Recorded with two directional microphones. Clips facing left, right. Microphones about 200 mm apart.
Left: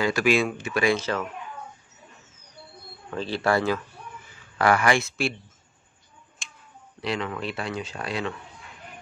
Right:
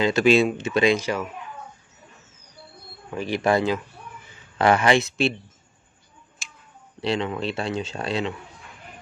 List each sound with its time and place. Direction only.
0.0 s speech: 25° right (ahead or behind)
0.9 s speech: 10° right (ahead or behind)
3.1 s speech: 15° right (ahead or behind)
6.4 s a sound: 5° right (ahead or behind)
7.0 s speech: 25° right (ahead or behind)